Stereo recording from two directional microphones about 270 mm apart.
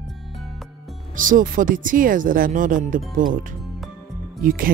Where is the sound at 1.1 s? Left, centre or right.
Right.